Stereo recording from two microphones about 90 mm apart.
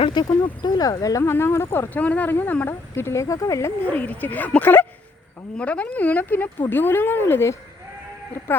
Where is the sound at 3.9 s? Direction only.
20° left (ahead or behind).